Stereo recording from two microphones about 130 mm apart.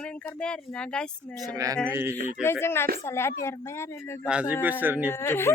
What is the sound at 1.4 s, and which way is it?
Speech, 25° right (ahead or behind).